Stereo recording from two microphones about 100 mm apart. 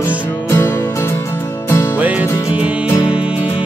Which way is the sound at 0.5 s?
25° left (ahead or behind).